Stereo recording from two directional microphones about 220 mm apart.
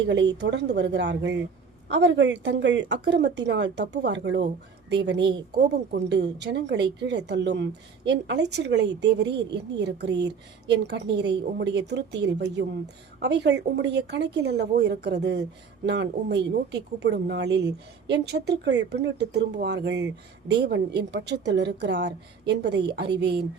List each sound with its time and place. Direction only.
0.0 s speech: 55° right (ahead or behind)